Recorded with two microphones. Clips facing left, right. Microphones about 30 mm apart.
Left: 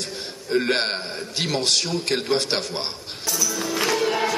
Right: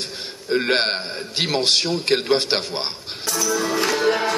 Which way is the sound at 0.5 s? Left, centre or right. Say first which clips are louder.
Right 2 dB; right.